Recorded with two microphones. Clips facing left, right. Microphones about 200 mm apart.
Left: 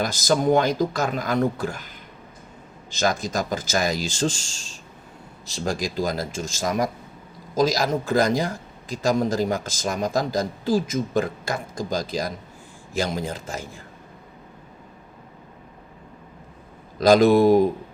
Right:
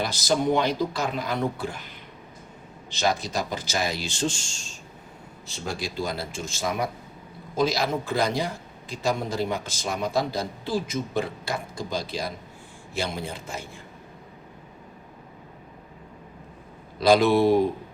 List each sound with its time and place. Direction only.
0.0 s a man's voice: 45° left (ahead or behind)
2.9 s a man's voice: 45° left (ahead or behind)
4.3 s speech: 90° left
6.4 s a man's voice: 45° left (ahead or behind)
17.0 s a man's voice: 45° left (ahead or behind)